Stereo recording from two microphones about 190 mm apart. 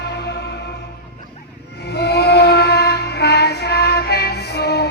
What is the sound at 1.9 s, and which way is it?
Music, 60° left (ahead or behind).